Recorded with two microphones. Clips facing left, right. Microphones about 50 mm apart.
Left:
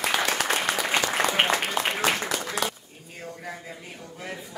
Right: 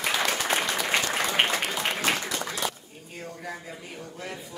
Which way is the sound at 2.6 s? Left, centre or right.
Left.